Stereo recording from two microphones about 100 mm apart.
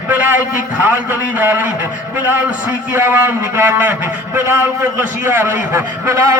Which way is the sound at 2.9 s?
20° right (ahead or behind).